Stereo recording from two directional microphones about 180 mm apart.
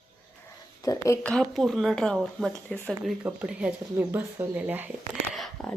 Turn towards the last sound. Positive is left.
turn(degrees=0)  # may be behind; listen again after turning